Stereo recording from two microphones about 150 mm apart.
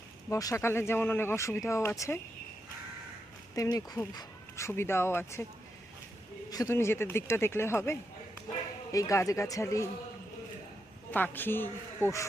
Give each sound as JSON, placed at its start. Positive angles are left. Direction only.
{"t": 0.3, "sound": "speech", "side_deg": 20}
{"t": 3.5, "sound": "speech", "side_deg": 25}
{"t": 6.5, "sound": "speech", "side_deg": 20}
{"t": 11.1, "sound": "speech", "side_deg": 15}
{"t": 12.0, "sound": "speech", "side_deg": -15}